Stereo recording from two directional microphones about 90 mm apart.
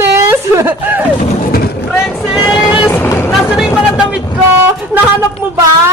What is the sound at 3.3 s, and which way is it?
Vehicle, 5° right (ahead or behind).